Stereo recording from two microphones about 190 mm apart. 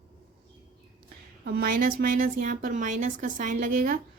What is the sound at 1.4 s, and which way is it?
A woman's voice, 55° right (ahead or behind).